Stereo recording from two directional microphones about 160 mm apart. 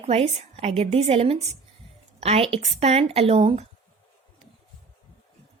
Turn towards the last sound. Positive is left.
turn(degrees=-35)  # may be behind; listen again after turning